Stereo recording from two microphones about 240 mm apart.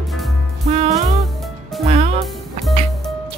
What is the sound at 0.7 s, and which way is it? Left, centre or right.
Music, right.